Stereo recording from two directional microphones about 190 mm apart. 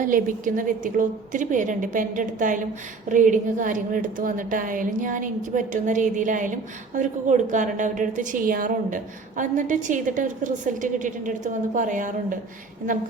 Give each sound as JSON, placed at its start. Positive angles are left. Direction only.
{"t": 0.0, "sound": "a woman's voice", "side_deg": -45}